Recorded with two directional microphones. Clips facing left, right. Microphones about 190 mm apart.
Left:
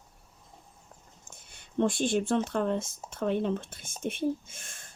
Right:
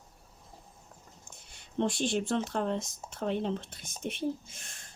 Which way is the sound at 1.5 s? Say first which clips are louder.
Left 3 dB; 50° left (ahead or behind).